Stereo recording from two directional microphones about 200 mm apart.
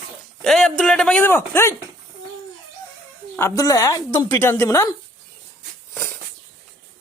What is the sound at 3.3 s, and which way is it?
A woman's voice, 15° left (ahead or behind).